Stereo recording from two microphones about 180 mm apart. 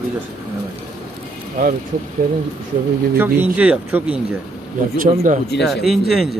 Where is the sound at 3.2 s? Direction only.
10° right (ahead or behind).